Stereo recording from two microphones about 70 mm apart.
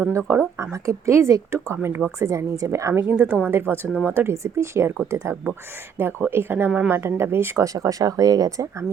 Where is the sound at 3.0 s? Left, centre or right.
Right.